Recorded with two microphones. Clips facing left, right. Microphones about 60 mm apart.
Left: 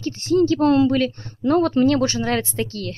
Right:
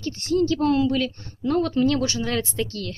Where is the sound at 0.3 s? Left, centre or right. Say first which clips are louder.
Left 4 dB; left.